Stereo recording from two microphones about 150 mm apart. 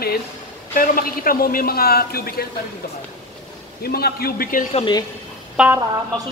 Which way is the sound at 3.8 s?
90° left.